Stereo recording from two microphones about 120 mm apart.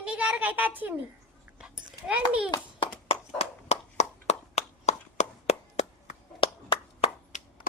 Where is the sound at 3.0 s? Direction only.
60° left (ahead or behind).